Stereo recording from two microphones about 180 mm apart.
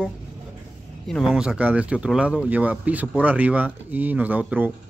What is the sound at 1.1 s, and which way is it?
Speech, centre (ahead or behind).